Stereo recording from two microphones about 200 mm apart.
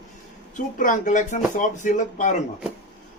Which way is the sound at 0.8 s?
40° left (ahead or behind).